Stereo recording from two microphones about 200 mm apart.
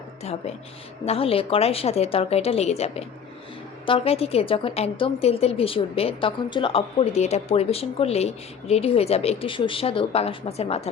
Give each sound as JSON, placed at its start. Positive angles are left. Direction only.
{"t": 1.0, "sound": "a woman's voice", "side_deg": 30}